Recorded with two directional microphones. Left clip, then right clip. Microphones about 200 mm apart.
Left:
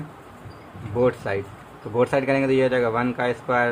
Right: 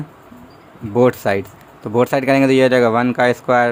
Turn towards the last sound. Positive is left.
turn(degrees=-55)  # may be behind; listen again after turning